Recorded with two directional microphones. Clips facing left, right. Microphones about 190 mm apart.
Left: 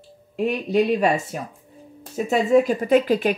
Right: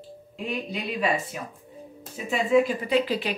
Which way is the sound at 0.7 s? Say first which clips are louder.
Left 9 dB; 45° left (ahead or behind).